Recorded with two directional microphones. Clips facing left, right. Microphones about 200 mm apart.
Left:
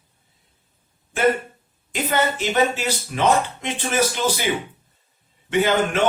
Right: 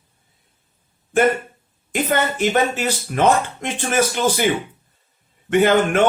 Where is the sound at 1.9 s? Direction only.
50° right (ahead or behind).